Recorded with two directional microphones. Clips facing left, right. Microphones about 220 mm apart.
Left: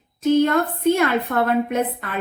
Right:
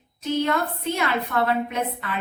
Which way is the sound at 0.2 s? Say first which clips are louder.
Left 7 dB; 50° left (ahead or behind).